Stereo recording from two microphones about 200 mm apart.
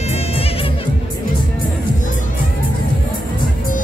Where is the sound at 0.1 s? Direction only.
30° left (ahead or behind).